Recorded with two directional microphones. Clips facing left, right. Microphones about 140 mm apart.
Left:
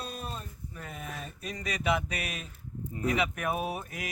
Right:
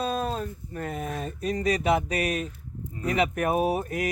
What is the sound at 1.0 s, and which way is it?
Music, 35° right (ahead or behind).